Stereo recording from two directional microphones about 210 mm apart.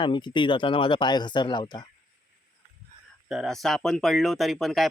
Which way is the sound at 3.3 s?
Centre (ahead or behind).